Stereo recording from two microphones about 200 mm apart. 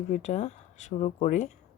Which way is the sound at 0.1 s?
35° left (ahead or behind).